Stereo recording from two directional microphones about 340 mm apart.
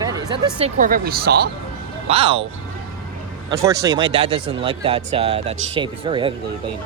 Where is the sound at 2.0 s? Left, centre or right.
Centre.